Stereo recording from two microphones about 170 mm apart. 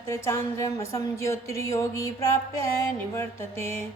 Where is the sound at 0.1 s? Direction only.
15° left (ahead or behind).